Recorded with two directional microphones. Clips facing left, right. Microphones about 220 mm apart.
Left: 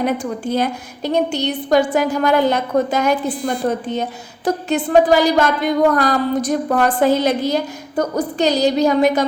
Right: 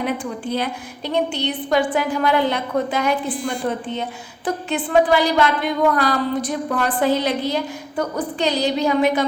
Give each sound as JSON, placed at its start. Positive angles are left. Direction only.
{"t": 0.0, "sound": "a woman's voice", "side_deg": 45}